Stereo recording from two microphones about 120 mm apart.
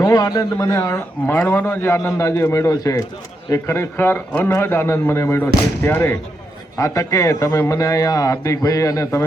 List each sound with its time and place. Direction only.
0.0 s a man's voice: 30° left (ahead or behind)